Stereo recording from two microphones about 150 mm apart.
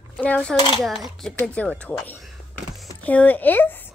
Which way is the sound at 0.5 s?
30° left (ahead or behind).